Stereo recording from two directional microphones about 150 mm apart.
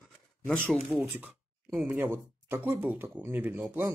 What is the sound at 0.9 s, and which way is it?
Speech, 10° right (ahead or behind).